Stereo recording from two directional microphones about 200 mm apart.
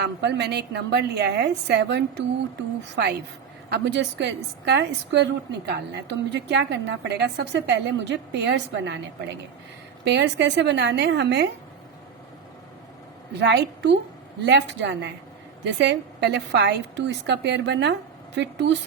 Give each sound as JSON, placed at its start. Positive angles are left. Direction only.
{"t": 0.0, "sound": "a woman's voice", "side_deg": -55}
{"t": 10.0, "sound": "a woman's voice", "side_deg": -60}
{"t": 13.4, "sound": "a woman's voice", "side_deg": -60}